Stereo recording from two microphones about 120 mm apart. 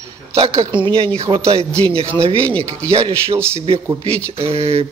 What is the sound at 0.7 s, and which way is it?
Speech, 45° right (ahead or behind).